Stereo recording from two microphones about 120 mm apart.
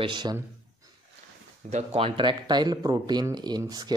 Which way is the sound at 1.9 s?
45° right (ahead or behind).